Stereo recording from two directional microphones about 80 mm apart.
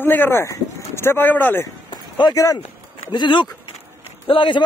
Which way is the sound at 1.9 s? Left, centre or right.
Left.